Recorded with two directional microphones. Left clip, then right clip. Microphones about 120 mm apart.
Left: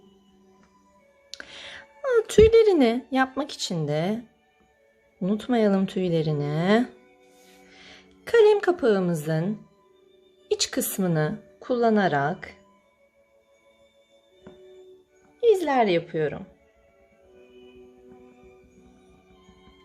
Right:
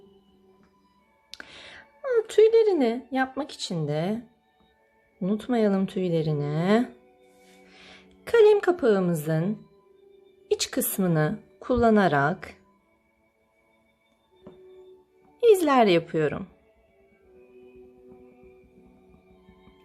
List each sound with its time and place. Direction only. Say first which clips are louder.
1.3 s music: left 3 dB; centre (ahead or behind)
2.0 s speech: left 2 dB; 15° left (ahead or behind)
5.2 s speech: left 2 dB; 10° left (ahead or behind)
7.7 s a woman's voice: left 1 dB; 15° right (ahead or behind)
15.4 s speech: right 2 dB; 40° right (ahead or behind)
18.1 s music: left 1 dB; 30° left (ahead or behind)